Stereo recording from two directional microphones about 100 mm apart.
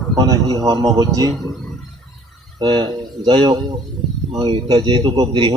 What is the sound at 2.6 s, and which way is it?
Speech, 50° right (ahead or behind).